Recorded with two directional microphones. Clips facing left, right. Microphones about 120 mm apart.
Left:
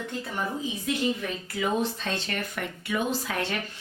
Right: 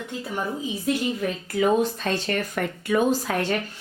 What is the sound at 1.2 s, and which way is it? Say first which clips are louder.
Speech: right 6 dB; 40° right (ahead or behind).